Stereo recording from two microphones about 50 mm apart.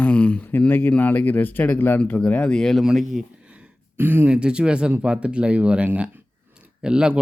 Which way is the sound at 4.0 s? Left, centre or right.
Right.